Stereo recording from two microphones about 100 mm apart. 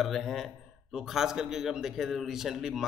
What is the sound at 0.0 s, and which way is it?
A man's voice, centre (ahead or behind).